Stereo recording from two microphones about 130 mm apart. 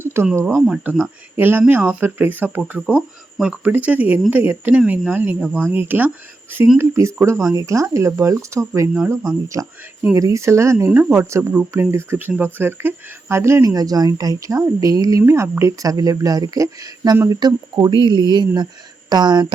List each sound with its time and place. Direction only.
0.0 s a sound: 20° right (ahead or behind)
0.9 s speech: 15° right (ahead or behind)
5.4 s speech: 5° left (ahead or behind)
5.7 s speech: 15° right (ahead or behind); by 19.5 s 35° right (ahead or behind)